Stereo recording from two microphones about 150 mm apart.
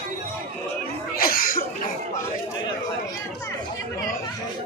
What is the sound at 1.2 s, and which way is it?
Chuckle, 75° left (ahead or behind).